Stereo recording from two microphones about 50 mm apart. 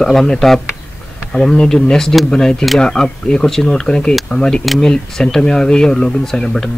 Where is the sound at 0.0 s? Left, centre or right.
Centre.